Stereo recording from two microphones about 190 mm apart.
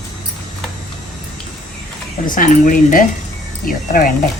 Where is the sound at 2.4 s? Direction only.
45° left (ahead or behind).